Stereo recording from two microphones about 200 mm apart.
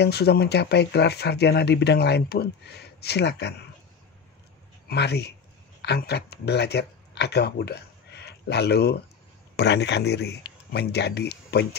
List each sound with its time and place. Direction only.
0.0 s speech: 55° left (ahead or behind)
4.8 s speech: 55° left (ahead or behind)